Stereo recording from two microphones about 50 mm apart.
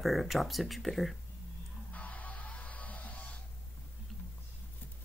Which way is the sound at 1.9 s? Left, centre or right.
Left.